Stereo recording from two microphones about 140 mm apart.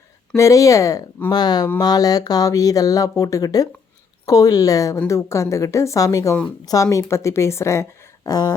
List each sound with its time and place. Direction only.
0.3 s speech: 20° left (ahead or behind)